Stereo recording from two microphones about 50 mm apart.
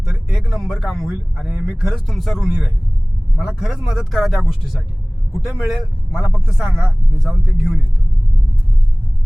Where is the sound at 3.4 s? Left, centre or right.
Centre.